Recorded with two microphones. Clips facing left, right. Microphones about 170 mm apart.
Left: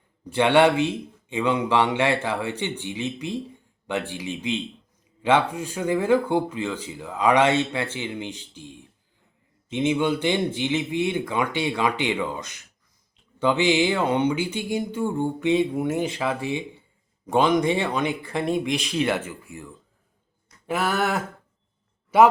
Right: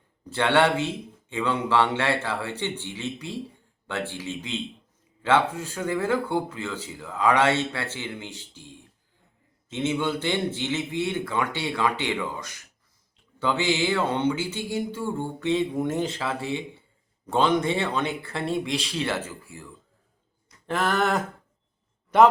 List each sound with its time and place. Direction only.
0.3 s speech: 15° left (ahead or behind)
20.7 s a man's voice: 10° left (ahead or behind)